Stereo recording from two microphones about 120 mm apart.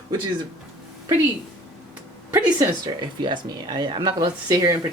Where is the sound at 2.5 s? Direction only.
40° right (ahead or behind).